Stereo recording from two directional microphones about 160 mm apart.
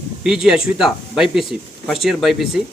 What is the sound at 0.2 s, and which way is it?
Speech, 5° right (ahead or behind).